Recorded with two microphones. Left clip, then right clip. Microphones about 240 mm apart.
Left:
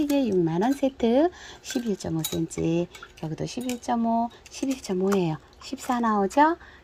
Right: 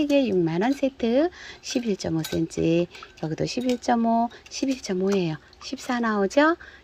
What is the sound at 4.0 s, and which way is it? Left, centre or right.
Speech, right.